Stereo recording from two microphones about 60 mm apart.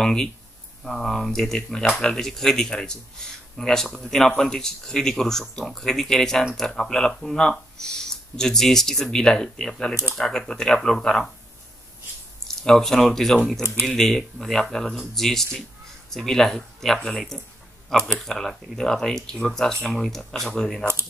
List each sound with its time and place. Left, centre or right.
0.0 s speech: centre
12.6 s speech: centre
13.6 s speech: right
13.8 s speech: centre